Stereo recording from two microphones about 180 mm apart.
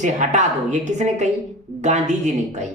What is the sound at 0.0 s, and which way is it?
Speech, 40° right (ahead or behind).